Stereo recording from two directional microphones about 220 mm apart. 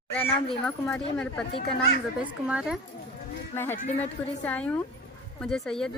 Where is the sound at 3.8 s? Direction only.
30° left (ahead or behind).